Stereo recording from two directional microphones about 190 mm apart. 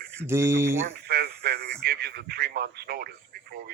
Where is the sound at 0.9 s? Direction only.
55° right (ahead or behind).